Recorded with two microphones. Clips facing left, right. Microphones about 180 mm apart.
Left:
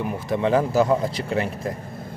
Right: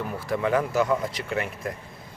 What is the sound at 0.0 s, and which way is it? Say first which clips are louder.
Speech: left 4 dB; 20° left (ahead or behind).